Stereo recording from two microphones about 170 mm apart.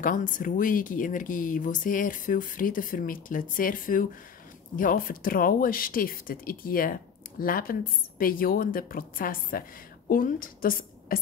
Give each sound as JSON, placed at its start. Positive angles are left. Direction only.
{"t": 0.0, "sound": "a woman's voice", "side_deg": 50}